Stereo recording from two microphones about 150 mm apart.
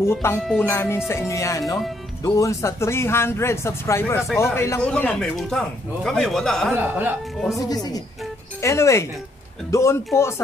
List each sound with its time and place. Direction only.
0.0 s speech: 15° left (ahead or behind)
0.6 s music: 15° left (ahead or behind)
2.2 s speech: 20° left (ahead or behind)
4.6 s music: 20° left (ahead or behind)
4.8 s speech: 10° left (ahead or behind)
6.7 s speech: 10° right (ahead or behind)
7.5 s music: 25° left (ahead or behind)
8.5 s speech: 20° left (ahead or behind)
9.7 s music: 20° left (ahead or behind)
10.1 s speech: 20° left (ahead or behind)